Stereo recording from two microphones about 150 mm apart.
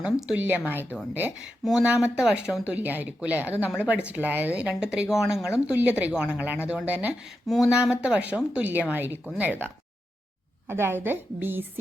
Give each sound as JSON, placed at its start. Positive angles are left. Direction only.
{"t": 0.0, "sound": "speech", "side_deg": -5}
{"t": 7.4, "sound": "speech", "side_deg": 0}
{"t": 10.7, "sound": "speech", "side_deg": -15}